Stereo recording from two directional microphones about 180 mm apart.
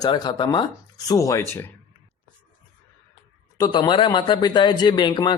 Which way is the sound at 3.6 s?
25° left (ahead or behind).